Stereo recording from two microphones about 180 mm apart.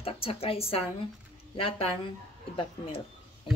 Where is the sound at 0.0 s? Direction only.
30° left (ahead or behind).